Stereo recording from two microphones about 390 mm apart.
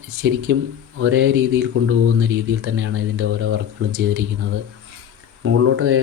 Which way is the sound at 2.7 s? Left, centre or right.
Right.